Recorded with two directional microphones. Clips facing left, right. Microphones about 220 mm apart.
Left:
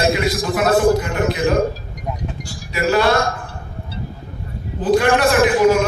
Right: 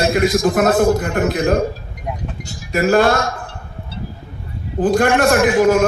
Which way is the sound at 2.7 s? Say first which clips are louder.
Right 3 dB; 50° right (ahead or behind).